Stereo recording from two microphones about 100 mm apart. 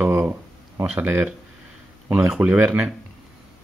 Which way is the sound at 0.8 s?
20° right (ahead or behind).